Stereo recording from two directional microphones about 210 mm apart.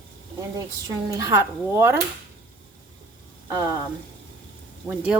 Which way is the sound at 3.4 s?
15° right (ahead or behind).